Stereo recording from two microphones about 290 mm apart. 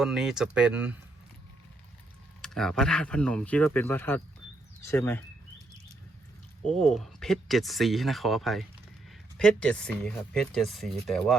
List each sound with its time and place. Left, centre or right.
0.0 s speech: centre
2.4 s speech: centre
6.7 s speech: centre